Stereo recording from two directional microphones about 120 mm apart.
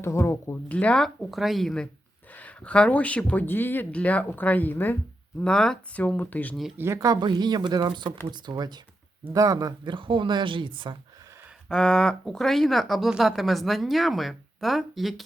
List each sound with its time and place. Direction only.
0.0 s speech: 25° left (ahead or behind)
0.7 s speech: 10° left (ahead or behind)
6.7 s speech: 20° right (ahead or behind); by 10.9 s 45° right (ahead or behind)
11.7 s speech: 5° left (ahead or behind)